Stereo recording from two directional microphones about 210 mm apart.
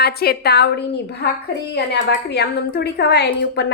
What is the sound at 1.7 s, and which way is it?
A woman's voice, 55° left (ahead or behind).